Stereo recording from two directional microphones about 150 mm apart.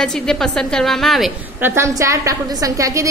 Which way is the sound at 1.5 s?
15° right (ahead or behind).